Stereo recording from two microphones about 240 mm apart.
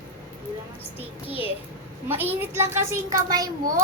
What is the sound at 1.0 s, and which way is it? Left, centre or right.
A child's voice, centre.